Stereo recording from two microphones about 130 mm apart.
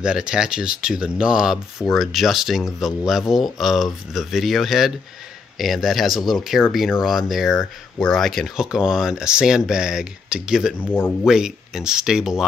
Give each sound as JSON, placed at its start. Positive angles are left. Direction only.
{"t": 0.0, "sound": "speech", "side_deg": -5}
{"t": 10.8, "sound": "speech", "side_deg": 15}
{"t": 11.2, "sound": "speech", "side_deg": -5}